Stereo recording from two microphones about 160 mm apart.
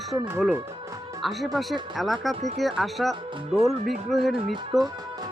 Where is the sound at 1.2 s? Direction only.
Centre (ahead or behind).